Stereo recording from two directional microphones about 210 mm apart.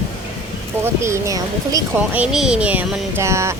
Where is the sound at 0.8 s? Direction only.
15° right (ahead or behind).